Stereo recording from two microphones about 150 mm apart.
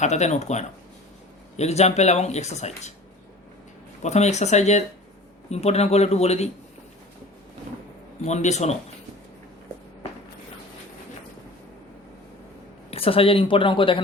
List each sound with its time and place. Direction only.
0.0 s speech: 50° left (ahead or behind)
4.0 s speech: 50° left (ahead or behind)
8.2 s speech: 50° left (ahead or behind)
12.9 s speech: 40° left (ahead or behind)